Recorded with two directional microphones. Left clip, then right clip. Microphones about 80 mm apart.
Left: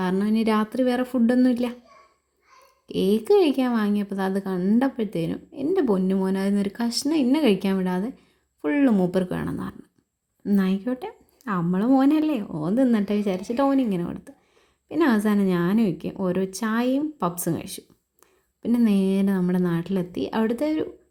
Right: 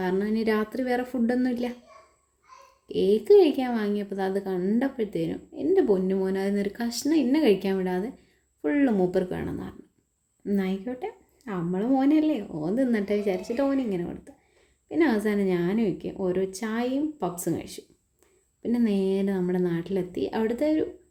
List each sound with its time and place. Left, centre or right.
0.0 s a woman's voice: left
2.8 s a woman's voice: left
18.9 s a woman's voice: left